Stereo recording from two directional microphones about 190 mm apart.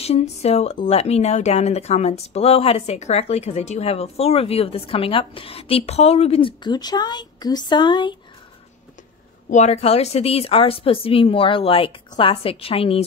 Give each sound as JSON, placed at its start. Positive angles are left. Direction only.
{"t": 0.0, "sound": "speech", "side_deg": 35}
{"t": 9.5, "sound": "a woman's voice", "side_deg": 35}